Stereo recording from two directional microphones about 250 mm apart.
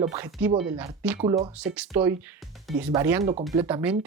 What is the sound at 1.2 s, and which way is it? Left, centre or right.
Speech, right.